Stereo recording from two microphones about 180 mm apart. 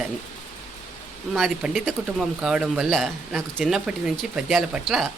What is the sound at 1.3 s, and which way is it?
Speech, centre (ahead or behind).